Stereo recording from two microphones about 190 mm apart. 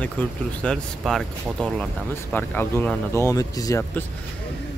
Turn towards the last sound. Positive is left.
turn(degrees=15)  # may be behind; listen again after turning